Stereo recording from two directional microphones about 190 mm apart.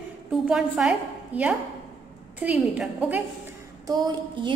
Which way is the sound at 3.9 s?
20° right (ahead or behind).